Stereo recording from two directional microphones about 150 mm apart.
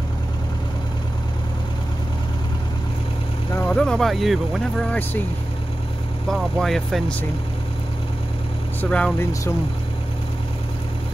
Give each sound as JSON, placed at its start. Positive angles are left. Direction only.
{"t": 3.5, "sound": "speech", "side_deg": 5}
{"t": 6.2, "sound": "speech", "side_deg": 0}
{"t": 8.8, "sound": "speech", "side_deg": 5}
{"t": 9.2, "sound": "speech", "side_deg": 20}